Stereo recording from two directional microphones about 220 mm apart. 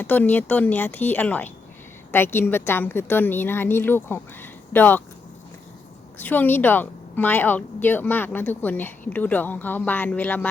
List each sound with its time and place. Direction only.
0.0 s a woman's voice: 10° left (ahead or behind)
6.1 s a woman's voice: 10° left (ahead or behind)